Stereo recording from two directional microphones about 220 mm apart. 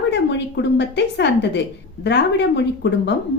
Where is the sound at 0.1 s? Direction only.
50° left (ahead or behind).